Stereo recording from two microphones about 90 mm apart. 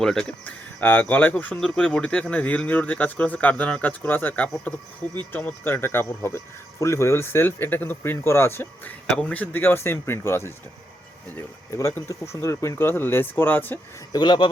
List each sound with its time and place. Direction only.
0.0 s speech: 5° left (ahead or behind)
0.4 s speech: 20° left (ahead or behind)
1.5 s speech: 10° left (ahead or behind); by 10.5 s 30° left (ahead or behind)
11.7 s speech: 35° left (ahead or behind)
14.1 s speech: 60° left (ahead or behind)